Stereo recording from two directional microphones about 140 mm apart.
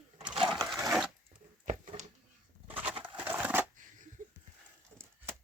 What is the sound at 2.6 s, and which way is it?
Bird, 10° right (ahead or behind).